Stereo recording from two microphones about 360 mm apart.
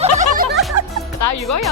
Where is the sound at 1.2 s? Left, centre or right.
Left.